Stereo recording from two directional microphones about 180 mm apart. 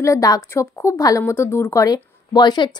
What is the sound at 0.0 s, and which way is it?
A woman's voice, 20° left (ahead or behind).